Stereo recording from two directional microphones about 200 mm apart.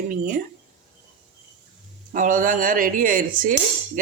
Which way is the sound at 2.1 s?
40° right (ahead or behind).